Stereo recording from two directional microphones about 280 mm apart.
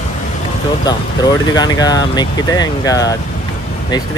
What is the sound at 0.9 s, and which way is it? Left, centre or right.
Speech, centre.